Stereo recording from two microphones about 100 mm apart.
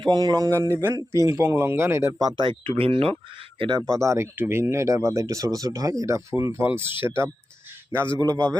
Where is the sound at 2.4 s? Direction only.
55° right (ahead or behind).